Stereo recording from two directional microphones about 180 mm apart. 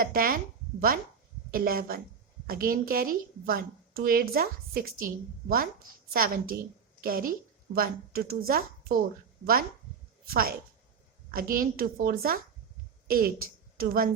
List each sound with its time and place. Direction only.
0.0 s a woman's voice: 55° right (ahead or behind)
6.1 s a woman's voice: 55° right (ahead or behind)
10.2 s a woman's voice: 55° right (ahead or behind)